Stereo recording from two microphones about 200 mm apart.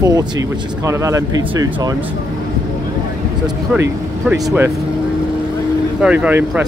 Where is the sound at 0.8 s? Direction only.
15° right (ahead or behind).